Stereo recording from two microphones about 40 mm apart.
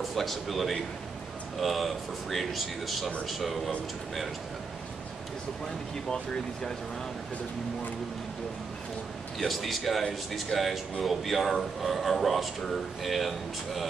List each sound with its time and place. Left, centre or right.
0.0 s a man's voice: centre
6.1 s speech: left
9.4 s a man's voice: centre